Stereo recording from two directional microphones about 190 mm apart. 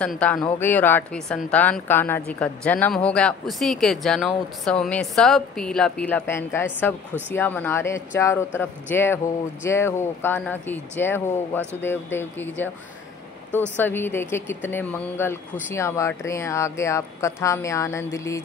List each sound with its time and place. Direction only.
0.0 s speech: 5° left (ahead or behind)
13.7 s speech: 10° left (ahead or behind)